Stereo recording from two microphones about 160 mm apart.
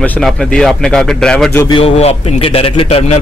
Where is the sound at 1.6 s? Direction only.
35° left (ahead or behind).